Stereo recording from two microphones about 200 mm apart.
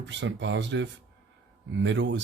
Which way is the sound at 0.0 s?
65° right (ahead or behind).